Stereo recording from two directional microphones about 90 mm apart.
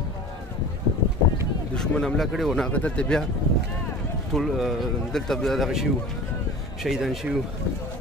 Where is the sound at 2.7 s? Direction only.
15° left (ahead or behind).